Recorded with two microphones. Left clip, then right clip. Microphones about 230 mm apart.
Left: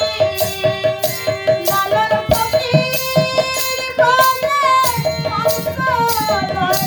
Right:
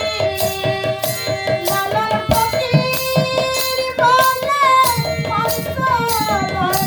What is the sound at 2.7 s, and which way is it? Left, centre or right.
Music, centre.